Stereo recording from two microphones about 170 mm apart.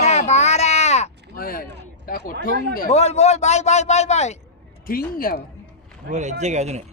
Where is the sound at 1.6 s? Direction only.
90° right.